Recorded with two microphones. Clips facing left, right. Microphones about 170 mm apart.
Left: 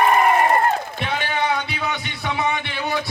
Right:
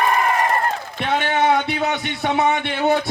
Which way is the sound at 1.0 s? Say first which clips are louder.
Right 6 dB; 50° right (ahead or behind).